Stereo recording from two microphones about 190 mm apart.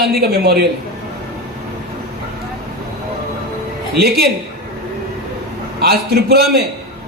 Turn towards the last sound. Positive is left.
turn(degrees=-55)  # may be behind; listen again after turning